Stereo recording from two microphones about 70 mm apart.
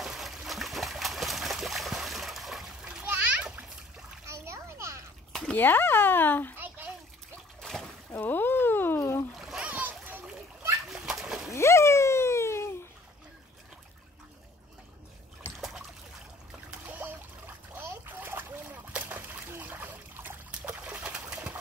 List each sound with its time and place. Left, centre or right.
0.0 s a sound: centre
3.0 s splash: right
4.3 s splash: right
5.5 s speech: left
6.5 s a sound: right
7.6 s splash: centre
8.1 s a sound: left
9.6 s splash: right
10.9 s splash: centre
11.5 s a sound: left
17.7 s splash: right
19.1 s trickle: right
20.8 s pigeon: centre